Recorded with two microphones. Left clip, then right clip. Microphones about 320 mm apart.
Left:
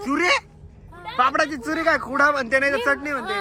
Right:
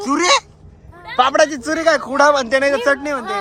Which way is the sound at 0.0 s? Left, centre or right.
Centre.